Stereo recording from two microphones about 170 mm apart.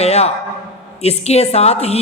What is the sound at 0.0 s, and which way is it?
A man's voice, 40° left (ahead or behind).